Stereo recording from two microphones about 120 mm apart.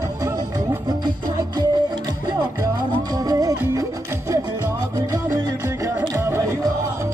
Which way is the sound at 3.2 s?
30° right (ahead or behind).